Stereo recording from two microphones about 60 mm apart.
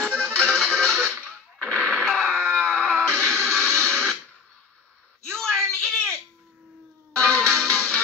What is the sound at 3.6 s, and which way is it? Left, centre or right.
Music, right.